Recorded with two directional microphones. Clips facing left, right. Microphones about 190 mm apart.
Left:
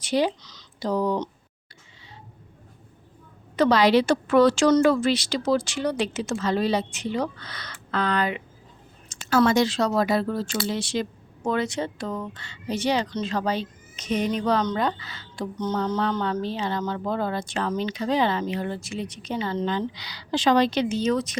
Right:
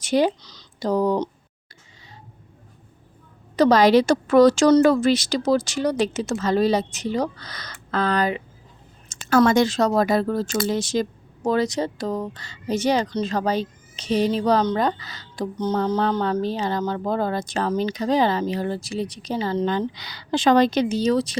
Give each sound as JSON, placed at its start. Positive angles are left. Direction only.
{"t": 0.0, "sound": "speech", "side_deg": -45}
{"t": 3.5, "sound": "speech", "side_deg": -40}
{"t": 9.0, "sound": "speech", "side_deg": -50}